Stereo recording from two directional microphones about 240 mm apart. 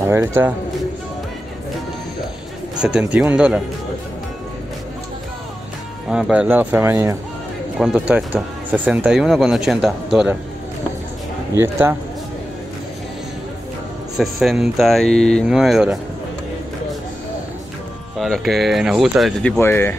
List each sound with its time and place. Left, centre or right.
0.1 s speech: centre
2.8 s speech: centre
6.0 s speech: centre
11.5 s speech: centre
14.1 s speech: centre
18.1 s speech: centre